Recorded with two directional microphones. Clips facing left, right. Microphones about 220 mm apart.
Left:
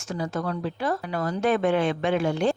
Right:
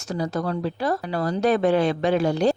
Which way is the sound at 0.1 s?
35° right (ahead or behind).